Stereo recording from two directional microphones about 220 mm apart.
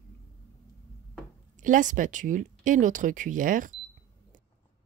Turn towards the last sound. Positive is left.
turn(degrees=-35)  # may be behind; listen again after turning